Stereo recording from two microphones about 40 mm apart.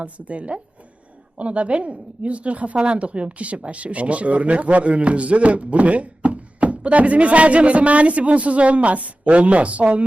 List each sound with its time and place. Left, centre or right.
0.0 s a woman's voice: right